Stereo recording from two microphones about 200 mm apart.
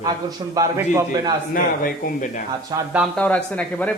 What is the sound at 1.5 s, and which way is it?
Speech, 45° left (ahead or behind).